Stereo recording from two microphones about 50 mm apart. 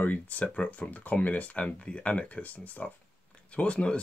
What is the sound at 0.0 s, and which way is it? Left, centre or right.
Speech, left.